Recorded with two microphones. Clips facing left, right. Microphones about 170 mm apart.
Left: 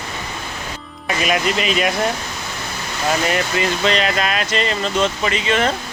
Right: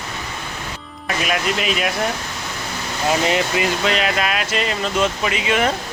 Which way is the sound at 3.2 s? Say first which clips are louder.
Right 1 dB; 20° right (ahead or behind).